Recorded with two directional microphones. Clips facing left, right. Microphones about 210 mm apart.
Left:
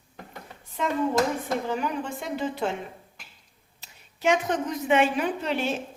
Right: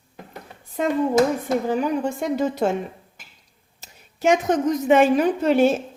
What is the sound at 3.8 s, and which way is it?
A woman's voice, 45° right (ahead or behind).